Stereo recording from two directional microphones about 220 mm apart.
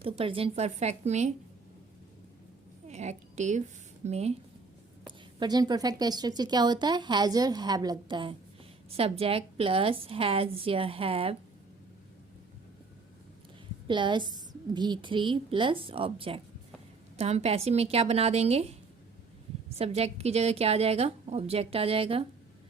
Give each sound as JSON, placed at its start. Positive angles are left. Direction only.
{"t": 0.0, "sound": "speech", "side_deg": -25}
{"t": 2.8, "sound": "a sound", "side_deg": -30}
{"t": 4.0, "sound": "speech", "side_deg": -30}
{"t": 5.4, "sound": "speech", "side_deg": -20}
{"t": 13.8, "sound": "speech", "side_deg": -20}
{"t": 19.7, "sound": "speech", "side_deg": -30}